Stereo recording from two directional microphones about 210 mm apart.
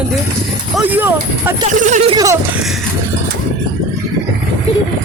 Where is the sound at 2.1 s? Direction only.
15° right (ahead or behind).